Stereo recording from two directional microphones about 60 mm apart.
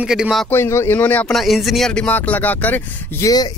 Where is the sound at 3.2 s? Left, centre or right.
Left.